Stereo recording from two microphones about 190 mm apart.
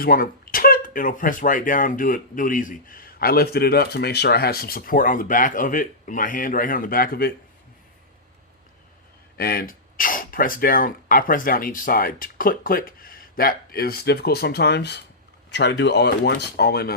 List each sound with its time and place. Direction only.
0.0 s speech: 50° left (ahead or behind)
9.4 s speech: 50° left (ahead or behind)